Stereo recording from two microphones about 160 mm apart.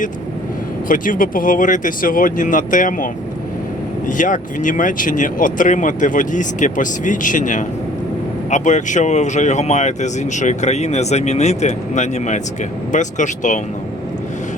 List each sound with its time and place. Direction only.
0.9 s speech: 55° left (ahead or behind)